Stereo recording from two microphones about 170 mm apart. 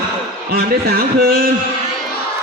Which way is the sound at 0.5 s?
65° right (ahead or behind).